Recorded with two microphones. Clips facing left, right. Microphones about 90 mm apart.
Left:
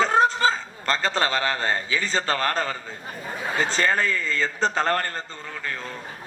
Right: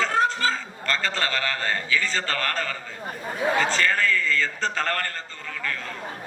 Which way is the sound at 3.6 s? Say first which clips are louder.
Left 5 dB; 20° left (ahead or behind).